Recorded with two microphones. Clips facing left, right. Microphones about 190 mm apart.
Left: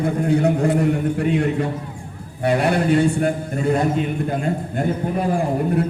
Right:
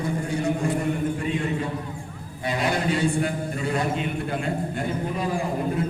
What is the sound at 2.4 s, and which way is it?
A man's voice, 65° left (ahead or behind).